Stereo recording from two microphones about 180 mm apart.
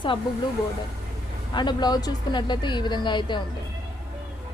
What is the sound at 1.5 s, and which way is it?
A woman's voice, 25° left (ahead or behind).